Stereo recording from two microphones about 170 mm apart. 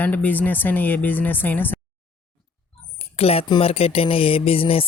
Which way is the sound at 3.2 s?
35° left (ahead or behind).